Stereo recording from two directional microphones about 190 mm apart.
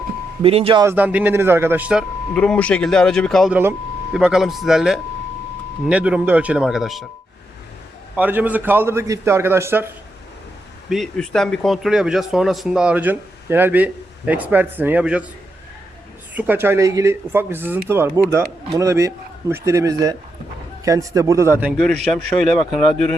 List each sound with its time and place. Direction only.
0.4 s speech: 30° right (ahead or behind)
0.9 s speech: 10° right (ahead or behind)
2.3 s speech: 5° left (ahead or behind)
8.1 s speech: 10° right (ahead or behind)
10.8 s speech: centre (ahead or behind)
16.3 s speech: 10° right (ahead or behind)